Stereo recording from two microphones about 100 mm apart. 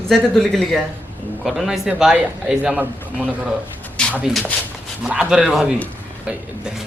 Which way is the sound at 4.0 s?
10° left (ahead or behind).